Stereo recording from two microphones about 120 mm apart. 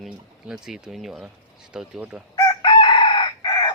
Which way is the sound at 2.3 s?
40° left (ahead or behind).